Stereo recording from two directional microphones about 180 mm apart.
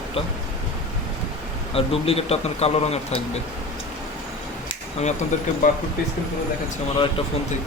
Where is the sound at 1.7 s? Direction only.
30° left (ahead or behind).